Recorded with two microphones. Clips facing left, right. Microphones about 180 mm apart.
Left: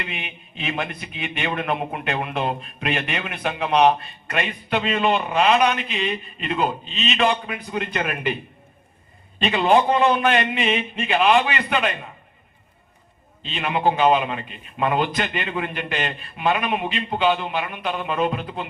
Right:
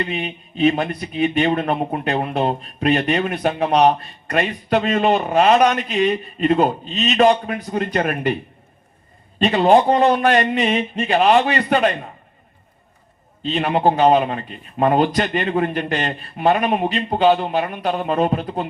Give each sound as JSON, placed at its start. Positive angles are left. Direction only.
{"t": 0.0, "sound": "speech", "side_deg": -35}
{"t": 9.4, "sound": "speech", "side_deg": -40}
{"t": 13.4, "sound": "speech", "side_deg": -40}